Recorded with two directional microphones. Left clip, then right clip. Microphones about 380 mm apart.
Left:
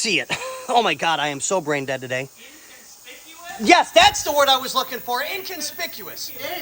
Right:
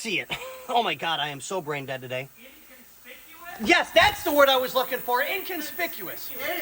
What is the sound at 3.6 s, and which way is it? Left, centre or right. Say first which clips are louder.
A man's voice: left 6 dB; centre.